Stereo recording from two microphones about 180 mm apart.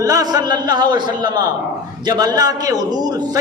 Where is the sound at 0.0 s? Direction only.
20° right (ahead or behind).